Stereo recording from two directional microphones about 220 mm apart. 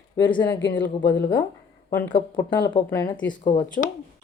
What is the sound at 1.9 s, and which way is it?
Speech, 20° left (ahead or behind).